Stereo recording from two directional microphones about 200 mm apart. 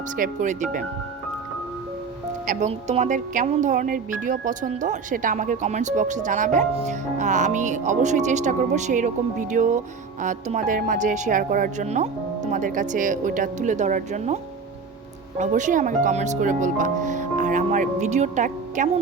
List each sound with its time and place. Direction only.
0.2 s speech: 35° right (ahead or behind)
2.5 s speech: 35° right (ahead or behind)
15.4 s speech: 40° right (ahead or behind)